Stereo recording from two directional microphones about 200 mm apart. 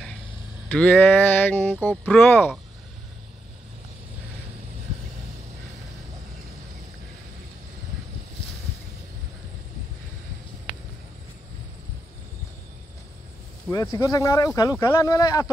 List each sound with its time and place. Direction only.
0.7 s speech: 5° left (ahead or behind)
13.7 s speech: 15° left (ahead or behind)